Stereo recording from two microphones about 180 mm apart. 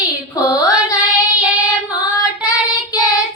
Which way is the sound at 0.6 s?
20° left (ahead or behind).